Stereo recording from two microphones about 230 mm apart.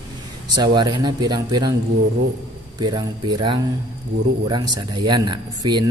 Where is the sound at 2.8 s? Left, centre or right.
Centre.